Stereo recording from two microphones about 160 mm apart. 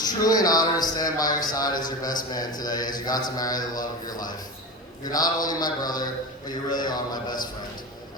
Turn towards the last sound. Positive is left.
turn(degrees=25)  # may be behind; listen again after turning